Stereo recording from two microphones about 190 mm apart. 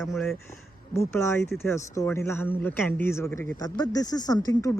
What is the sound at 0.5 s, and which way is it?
A woman's voice, 15° left (ahead or behind).